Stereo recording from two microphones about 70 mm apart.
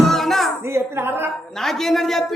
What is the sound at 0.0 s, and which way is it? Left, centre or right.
Music, centre.